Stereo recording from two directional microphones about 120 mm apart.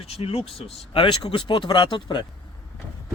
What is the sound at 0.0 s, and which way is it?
Speech, 55° left (ahead or behind).